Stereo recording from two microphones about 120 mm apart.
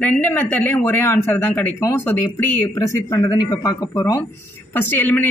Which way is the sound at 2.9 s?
30° left (ahead or behind).